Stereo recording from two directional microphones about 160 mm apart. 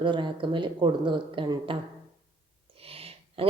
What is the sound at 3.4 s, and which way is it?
Speech, 35° right (ahead or behind).